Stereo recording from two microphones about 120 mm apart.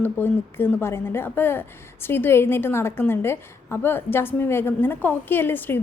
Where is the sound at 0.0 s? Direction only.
15° left (ahead or behind).